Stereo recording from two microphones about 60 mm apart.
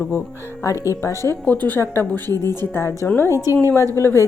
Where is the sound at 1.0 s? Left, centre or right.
Left.